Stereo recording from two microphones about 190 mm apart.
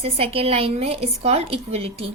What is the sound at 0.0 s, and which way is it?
A woman's voice, 30° right (ahead or behind).